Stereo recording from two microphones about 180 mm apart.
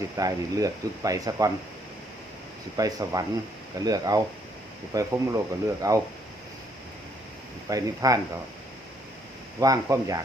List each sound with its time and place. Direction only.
0.2 s speech: 20° right (ahead or behind)
2.7 s speech: 20° right (ahead or behind)
7.7 s speech: 20° right (ahead or behind)
9.6 s speech: 20° right (ahead or behind)